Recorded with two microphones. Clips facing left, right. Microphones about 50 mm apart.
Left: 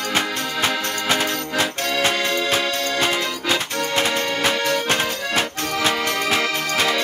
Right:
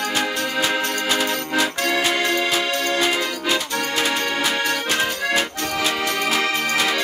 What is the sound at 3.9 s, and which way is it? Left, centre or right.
Accordion, left.